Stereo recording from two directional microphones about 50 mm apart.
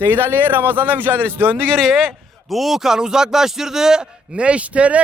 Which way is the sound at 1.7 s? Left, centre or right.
Centre.